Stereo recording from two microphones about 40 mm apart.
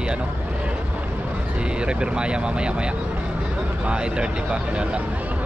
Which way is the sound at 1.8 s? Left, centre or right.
Right.